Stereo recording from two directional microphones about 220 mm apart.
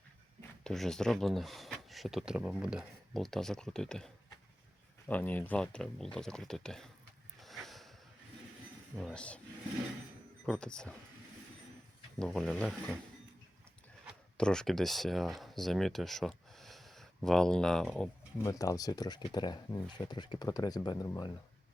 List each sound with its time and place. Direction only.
0.6 s speech: centre (ahead or behind)
7.3 s a sound: centre (ahead or behind)
9.0 s speech: 5° left (ahead or behind)
10.4 s speech: centre (ahead or behind)
12.2 s speech: 5° left (ahead or behind)
14.1 s speech: 5° left (ahead or behind)
18.4 s speech: 15° left (ahead or behind)